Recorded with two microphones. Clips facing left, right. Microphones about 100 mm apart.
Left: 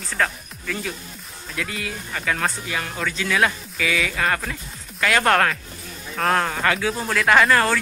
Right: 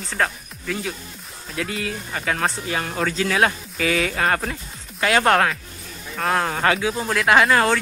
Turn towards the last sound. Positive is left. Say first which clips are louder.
# right 1 dB
turn(degrees=-20)  # may be behind; listen again after turning